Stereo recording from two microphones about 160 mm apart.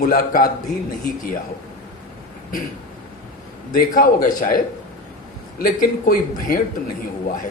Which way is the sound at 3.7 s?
60° left (ahead or behind).